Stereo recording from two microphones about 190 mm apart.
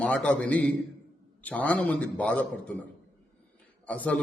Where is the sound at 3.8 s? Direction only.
10° left (ahead or behind).